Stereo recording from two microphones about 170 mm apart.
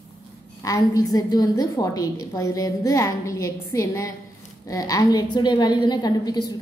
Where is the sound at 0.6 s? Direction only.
20° left (ahead or behind).